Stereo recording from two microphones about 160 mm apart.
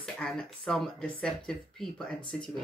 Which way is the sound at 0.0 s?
5° left (ahead or behind).